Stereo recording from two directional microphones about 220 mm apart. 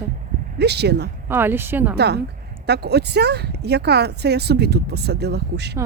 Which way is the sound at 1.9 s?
50° right (ahead or behind).